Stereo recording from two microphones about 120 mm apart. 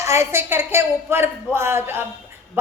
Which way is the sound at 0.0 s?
25° right (ahead or behind).